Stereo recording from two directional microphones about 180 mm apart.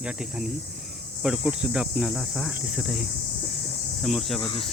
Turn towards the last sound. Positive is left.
turn(degrees=30)  # may be behind; listen again after turning